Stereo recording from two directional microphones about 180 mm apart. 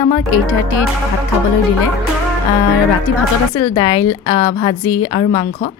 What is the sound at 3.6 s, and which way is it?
A woman's voice, 25° left (ahead or behind).